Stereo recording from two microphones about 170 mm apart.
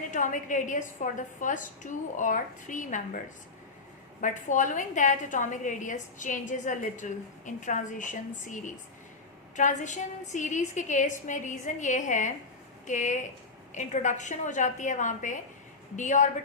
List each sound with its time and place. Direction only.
0.1 s a woman's voice: 50° left (ahead or behind)
4.2 s a woman's voice: 50° left (ahead or behind)